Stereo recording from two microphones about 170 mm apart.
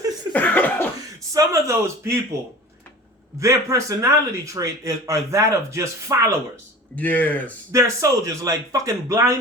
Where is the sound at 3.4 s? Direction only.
20° right (ahead or behind).